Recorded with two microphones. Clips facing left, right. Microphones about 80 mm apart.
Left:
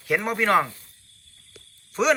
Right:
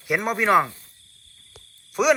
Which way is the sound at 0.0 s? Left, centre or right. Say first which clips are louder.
Right 1 dB; centre.